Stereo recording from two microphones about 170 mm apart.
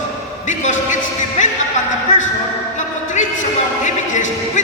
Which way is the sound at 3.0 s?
45° left (ahead or behind).